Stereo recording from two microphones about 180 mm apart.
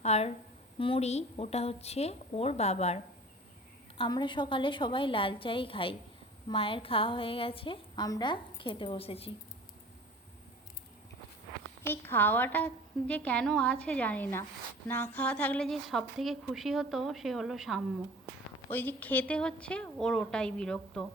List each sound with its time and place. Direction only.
0.0 s a woman's voice: 35° left (ahead or behind)
3.9 s a woman's voice: 25° left (ahead or behind)
11.8 s a woman's voice: 10° left (ahead or behind)
18.7 s a woman's voice: 10° left (ahead or behind)